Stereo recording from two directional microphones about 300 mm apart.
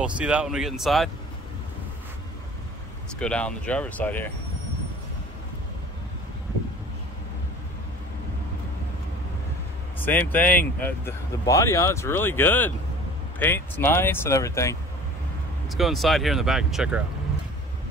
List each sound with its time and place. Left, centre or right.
0.0 s speech: centre
3.2 s speech: centre
10.0 s speech: centre